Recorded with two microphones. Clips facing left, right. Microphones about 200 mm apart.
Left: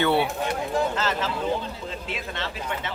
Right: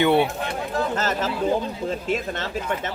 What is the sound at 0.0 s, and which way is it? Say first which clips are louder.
Speech: right 4 dB; 20° right (ahead or behind).